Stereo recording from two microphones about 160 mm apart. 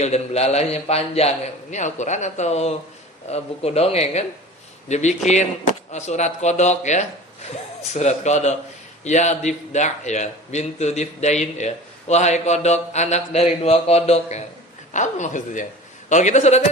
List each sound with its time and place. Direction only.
0.0 s a man's voice: 45° left (ahead or behind)